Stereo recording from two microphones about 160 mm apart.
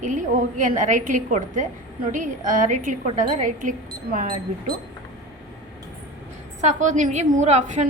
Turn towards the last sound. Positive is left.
turn(degrees=-45)  # may be behind; listen again after turning